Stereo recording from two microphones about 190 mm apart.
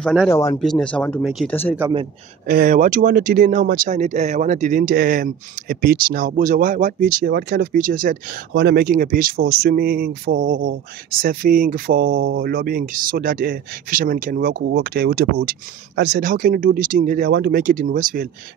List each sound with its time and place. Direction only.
0.0 s speech: 5° right (ahead or behind)
0.3 s speech: 15° left (ahead or behind)
0.6 s speech: centre (ahead or behind)
2.4 s speech: 45° right (ahead or behind)